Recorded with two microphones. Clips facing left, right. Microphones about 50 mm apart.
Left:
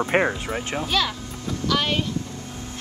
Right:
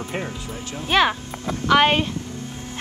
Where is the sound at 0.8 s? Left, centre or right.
Right.